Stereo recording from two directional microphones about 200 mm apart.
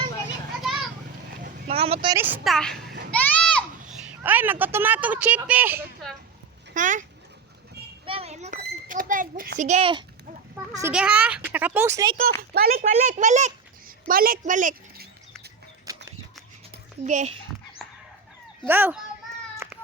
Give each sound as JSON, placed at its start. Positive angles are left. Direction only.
{"t": 0.6, "sound": "children playing", "side_deg": 0}
{"t": 1.6, "sound": "speech", "side_deg": -30}
{"t": 2.1, "sound": "a child's voice", "side_deg": -10}
{"t": 3.1, "sound": "a sound", "side_deg": 5}
{"t": 6.7, "sound": "speech", "side_deg": -40}
{"t": 8.0, "sound": "children playing", "side_deg": -30}
{"t": 10.5, "sound": "speech", "side_deg": -10}
{"t": 12.4, "sound": "speech", "side_deg": -50}
{"t": 12.8, "sound": "a child's voice", "side_deg": -35}
{"t": 15.9, "sound": "a sound", "side_deg": -15}
{"t": 17.0, "sound": "a child's voice", "side_deg": -35}
{"t": 18.6, "sound": "speech", "side_deg": -10}